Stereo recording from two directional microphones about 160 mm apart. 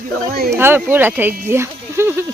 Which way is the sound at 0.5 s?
15° right (ahead or behind).